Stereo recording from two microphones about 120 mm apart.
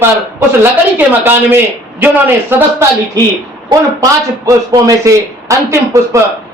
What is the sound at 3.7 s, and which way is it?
A man's voice, 30° right (ahead or behind).